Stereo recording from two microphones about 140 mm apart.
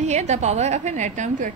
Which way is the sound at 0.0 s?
55° right (ahead or behind).